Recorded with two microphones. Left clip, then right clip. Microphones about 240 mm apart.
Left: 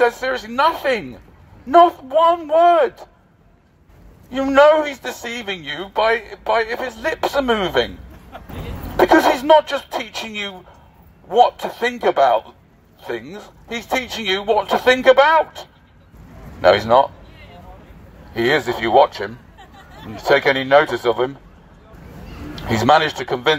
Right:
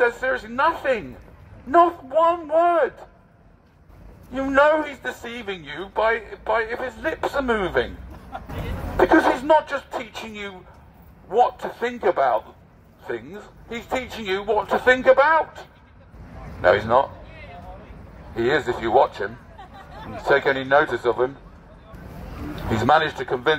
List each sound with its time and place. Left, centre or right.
0.0 s a man's voice: left
4.3 s a man's voice: left
8.9 s a man's voice: left
18.3 s speech: left
22.7 s a man's voice: left